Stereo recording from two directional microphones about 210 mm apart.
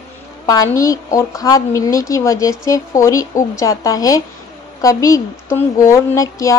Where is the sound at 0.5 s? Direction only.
15° left (ahead or behind).